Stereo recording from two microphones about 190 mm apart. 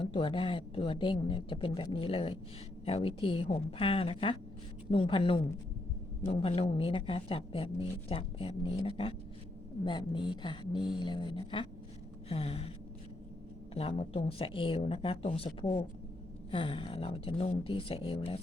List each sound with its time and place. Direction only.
0.0 s speech: 30° left (ahead or behind)
12.3 s gasp: 30° left (ahead or behind)
13.7 s speech: 30° left (ahead or behind)